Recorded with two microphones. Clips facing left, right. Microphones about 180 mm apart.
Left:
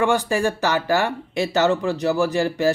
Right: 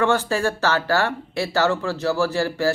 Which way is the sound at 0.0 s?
15° left (ahead or behind).